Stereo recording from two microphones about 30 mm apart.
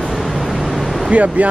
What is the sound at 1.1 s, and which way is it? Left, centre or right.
Speech, right.